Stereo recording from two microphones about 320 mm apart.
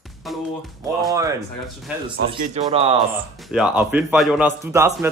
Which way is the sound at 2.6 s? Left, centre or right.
Centre.